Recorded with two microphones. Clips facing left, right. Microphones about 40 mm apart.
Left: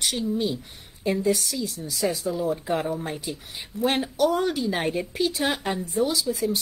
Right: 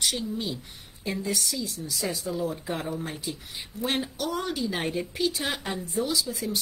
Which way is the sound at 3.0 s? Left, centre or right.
Left.